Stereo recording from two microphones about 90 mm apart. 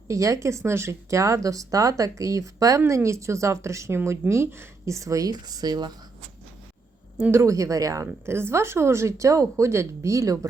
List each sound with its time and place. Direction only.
0.1 s speech: 35° right (ahead or behind)
7.2 s speech: 30° right (ahead or behind)
8.0 s speech: 30° right (ahead or behind)